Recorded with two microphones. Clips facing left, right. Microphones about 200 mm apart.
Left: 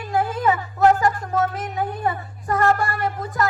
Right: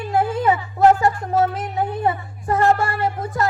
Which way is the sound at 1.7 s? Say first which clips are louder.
Right 3 dB; 25° right (ahead or behind).